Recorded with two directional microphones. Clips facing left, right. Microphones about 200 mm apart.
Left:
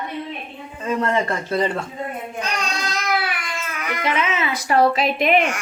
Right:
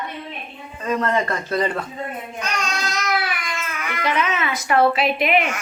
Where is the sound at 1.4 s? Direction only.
25° left (ahead or behind).